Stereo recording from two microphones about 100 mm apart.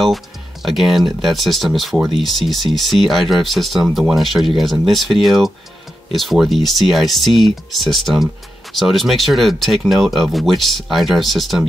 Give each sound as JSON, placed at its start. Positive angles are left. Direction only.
{"t": 0.0, "sound": "speech", "side_deg": 0}